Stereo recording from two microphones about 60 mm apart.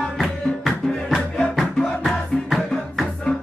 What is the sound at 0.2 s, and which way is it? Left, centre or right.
Music, centre.